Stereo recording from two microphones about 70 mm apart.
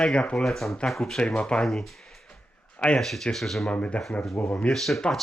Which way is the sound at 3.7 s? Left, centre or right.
Centre.